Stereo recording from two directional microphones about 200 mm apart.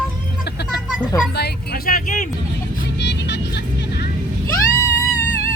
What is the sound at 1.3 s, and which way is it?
Speech, 50° left (ahead or behind).